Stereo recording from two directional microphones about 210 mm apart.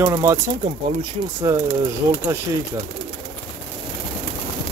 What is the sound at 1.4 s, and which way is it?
Speech, 15° right (ahead or behind).